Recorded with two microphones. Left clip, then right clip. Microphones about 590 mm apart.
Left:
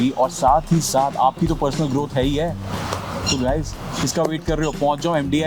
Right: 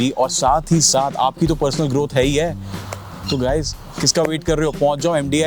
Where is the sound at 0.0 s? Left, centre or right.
Right.